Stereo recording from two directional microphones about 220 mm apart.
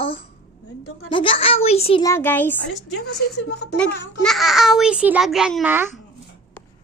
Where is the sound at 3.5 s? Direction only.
50° left (ahead or behind).